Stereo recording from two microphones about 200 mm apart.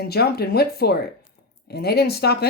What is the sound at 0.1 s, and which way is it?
Speech, 55° left (ahead or behind).